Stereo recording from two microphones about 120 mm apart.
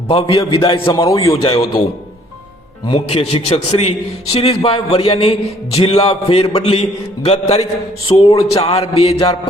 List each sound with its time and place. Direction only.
0.1 s a man's voice: 50° left (ahead or behind)
1.3 s a man's voice: 50° left (ahead or behind)
3.1 s a man's voice: 55° left (ahead or behind)